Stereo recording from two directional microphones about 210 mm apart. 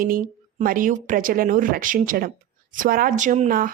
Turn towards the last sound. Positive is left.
turn(degrees=-40)  # may be behind; listen again after turning